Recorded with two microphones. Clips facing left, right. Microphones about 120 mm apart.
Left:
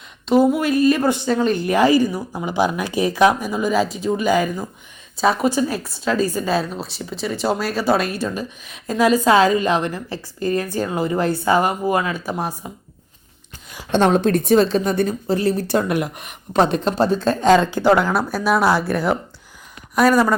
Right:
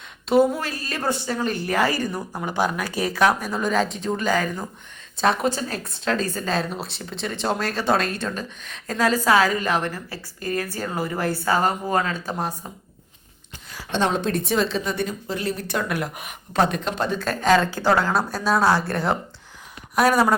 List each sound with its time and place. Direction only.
0.5 s a woman's voice: 15° left (ahead or behind)
13.9 s a woman's voice: 50° left (ahead or behind); by 19.0 s 10° left (ahead or behind)
20.0 s speech: 5° right (ahead or behind)